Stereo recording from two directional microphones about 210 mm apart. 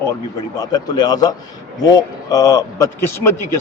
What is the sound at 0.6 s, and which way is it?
A man's voice, 20° left (ahead or behind).